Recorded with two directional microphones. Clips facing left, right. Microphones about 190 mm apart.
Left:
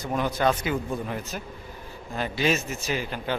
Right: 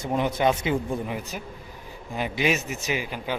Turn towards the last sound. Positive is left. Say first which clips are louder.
# even
turn(degrees=-10)  # may be behind; listen again after turning